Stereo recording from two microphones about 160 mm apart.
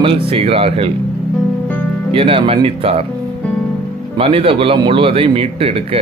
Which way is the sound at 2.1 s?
35° right (ahead or behind).